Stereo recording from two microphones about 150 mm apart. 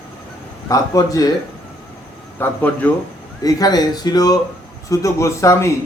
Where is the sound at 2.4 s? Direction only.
10° left (ahead or behind).